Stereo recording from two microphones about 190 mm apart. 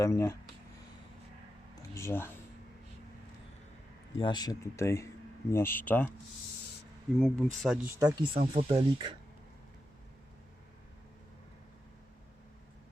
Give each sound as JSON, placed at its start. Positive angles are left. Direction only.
{"t": 0.0, "sound": "speech", "side_deg": 15}
{"t": 1.7, "sound": "a sound", "side_deg": 15}
{"t": 4.2, "sound": "speech", "side_deg": 20}
{"t": 7.2, "sound": "speech", "side_deg": 5}
{"t": 7.9, "sound": "speech", "side_deg": -20}